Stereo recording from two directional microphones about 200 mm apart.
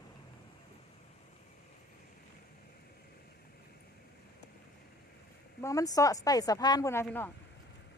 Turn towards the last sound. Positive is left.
turn(degrees=10)  # may be behind; listen again after turning